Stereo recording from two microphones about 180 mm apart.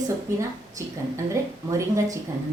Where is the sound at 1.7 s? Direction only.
20° right (ahead or behind).